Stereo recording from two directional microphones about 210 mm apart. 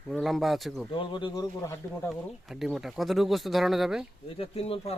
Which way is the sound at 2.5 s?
Centre (ahead or behind).